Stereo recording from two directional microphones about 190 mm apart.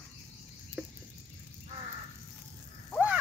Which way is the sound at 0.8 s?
5° right (ahead or behind).